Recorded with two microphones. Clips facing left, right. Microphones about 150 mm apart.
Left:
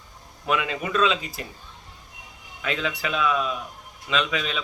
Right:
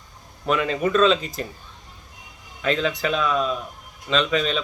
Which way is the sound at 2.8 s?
35° right (ahead or behind).